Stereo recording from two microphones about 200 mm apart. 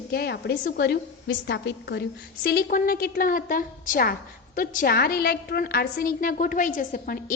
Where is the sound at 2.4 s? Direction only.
50° left (ahead or behind).